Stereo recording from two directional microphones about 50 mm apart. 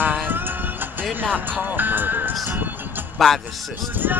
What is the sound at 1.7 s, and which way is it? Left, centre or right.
Music, right.